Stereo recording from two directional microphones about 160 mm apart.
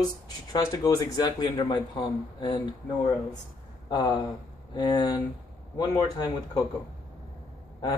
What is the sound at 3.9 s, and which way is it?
Speech, 25° left (ahead or behind).